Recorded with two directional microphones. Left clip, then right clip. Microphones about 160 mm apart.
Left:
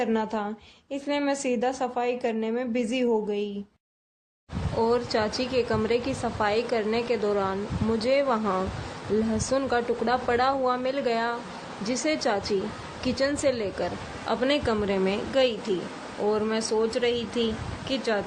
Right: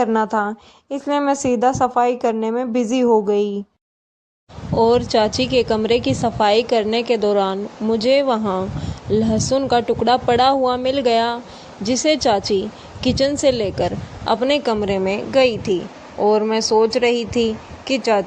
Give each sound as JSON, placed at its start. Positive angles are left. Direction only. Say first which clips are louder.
{"t": 0.0, "sound": "a woman's voice", "louder": "right 10 dB", "side_deg": -35}
{"t": 4.8, "sound": "a woman's voice", "louder": "right 10 dB", "side_deg": -35}